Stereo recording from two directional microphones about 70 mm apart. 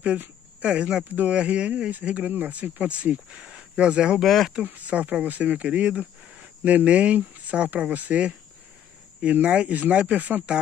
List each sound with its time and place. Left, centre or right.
0.0 s speech: centre
4.2 s speech: centre
4.6 s speech: right